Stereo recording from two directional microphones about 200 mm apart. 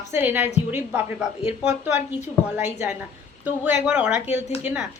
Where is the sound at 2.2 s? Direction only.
35° left (ahead or behind).